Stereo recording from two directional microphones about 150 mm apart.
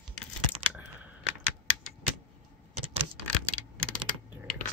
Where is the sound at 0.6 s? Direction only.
40° right (ahead or behind).